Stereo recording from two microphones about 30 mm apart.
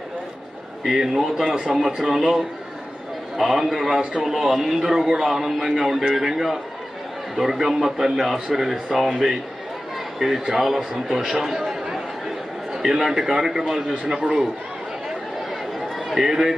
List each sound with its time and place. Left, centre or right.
0.9 s a man's voice: centre
3.3 s a man's voice: centre
11.1 s a man's voice: centre
11.3 s a man's voice: centre
12.7 s a man's voice: centre
16.2 s a man's voice: centre